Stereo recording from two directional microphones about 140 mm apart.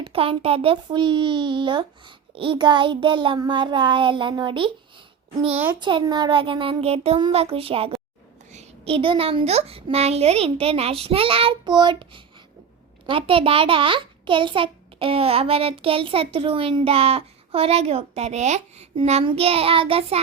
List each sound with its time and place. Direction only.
0.0 s a child's voice: 40° right (ahead or behind)
5.8 s a child's voice: 35° right (ahead or behind)